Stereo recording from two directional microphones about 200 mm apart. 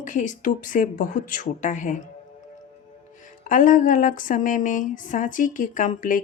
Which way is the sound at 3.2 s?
40° left (ahead or behind).